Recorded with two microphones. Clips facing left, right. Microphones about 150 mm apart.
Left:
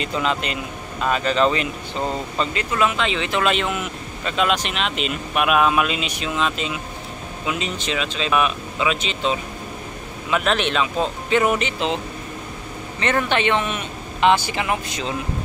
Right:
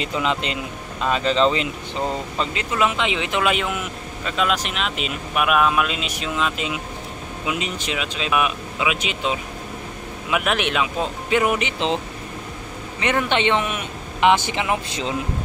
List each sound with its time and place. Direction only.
0.0 s speech: 15° right (ahead or behind)
13.0 s speech: 15° right (ahead or behind)